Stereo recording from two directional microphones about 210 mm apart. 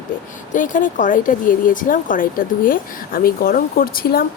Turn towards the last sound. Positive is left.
turn(degrees=45)  # may be behind; listen again after turning